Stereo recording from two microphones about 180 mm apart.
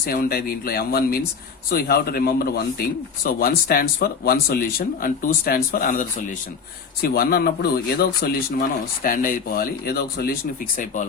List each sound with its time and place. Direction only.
0.0 s speech: 60° left (ahead or behind)